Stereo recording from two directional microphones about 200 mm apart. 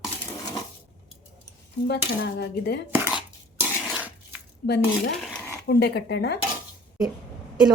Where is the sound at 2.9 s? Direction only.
10° right (ahead or behind).